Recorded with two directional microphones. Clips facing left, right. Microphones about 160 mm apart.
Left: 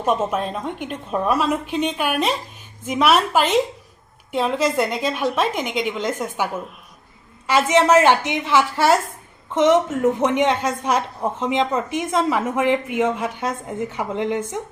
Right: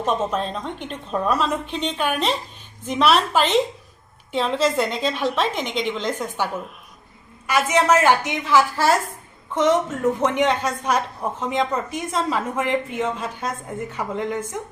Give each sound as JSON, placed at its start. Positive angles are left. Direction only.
{"t": 0.0, "sound": "a woman's voice", "side_deg": 10}
{"t": 7.4, "sound": "a woman's voice", "side_deg": 25}